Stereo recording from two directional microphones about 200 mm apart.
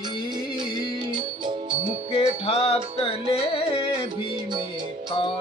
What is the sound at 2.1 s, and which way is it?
Music, 30° left (ahead or behind).